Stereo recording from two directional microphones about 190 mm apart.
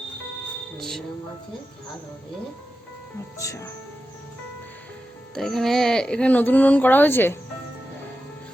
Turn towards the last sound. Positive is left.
turn(degrees=10)  # may be behind; listen again after turning